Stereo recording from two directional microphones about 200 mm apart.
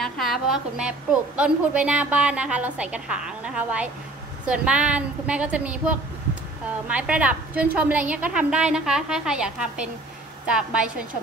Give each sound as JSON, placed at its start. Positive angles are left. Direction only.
{"t": 0.0, "sound": "a woman's voice", "side_deg": 0}